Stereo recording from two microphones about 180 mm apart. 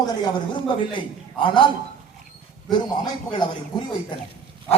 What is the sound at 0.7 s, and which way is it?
Speech, 25° left (ahead or behind).